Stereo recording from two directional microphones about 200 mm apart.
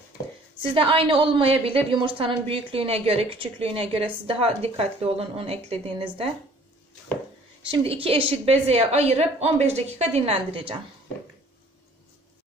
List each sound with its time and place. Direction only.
0.7 s a woman's voice: 25° right (ahead or behind)
7.7 s a woman's voice: 30° right (ahead or behind)